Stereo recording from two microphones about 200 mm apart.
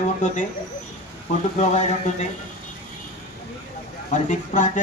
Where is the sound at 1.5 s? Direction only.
35° left (ahead or behind).